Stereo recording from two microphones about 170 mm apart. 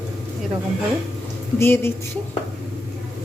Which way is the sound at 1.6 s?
15° left (ahead or behind).